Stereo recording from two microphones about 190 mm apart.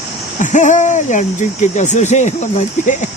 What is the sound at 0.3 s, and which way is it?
Speech, 40° left (ahead or behind).